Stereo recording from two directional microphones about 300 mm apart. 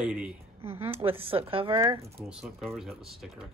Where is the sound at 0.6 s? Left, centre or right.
Centre.